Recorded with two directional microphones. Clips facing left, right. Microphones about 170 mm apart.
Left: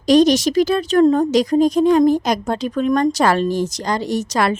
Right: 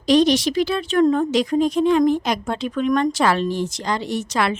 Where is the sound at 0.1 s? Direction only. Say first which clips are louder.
Left 3 dB; 45° left (ahead or behind).